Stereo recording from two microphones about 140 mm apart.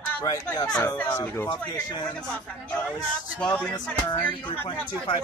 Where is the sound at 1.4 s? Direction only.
30° left (ahead or behind).